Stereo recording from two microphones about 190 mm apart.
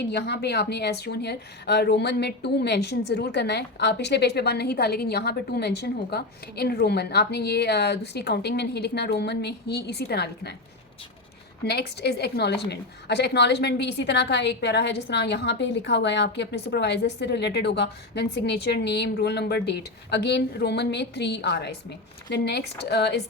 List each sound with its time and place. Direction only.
0.1 s a woman's voice: 60° left (ahead or behind)
11.6 s a woman's voice: 60° left (ahead or behind)